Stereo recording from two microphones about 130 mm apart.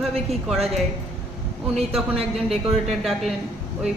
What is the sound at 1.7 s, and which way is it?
Speech, 50° right (ahead or behind).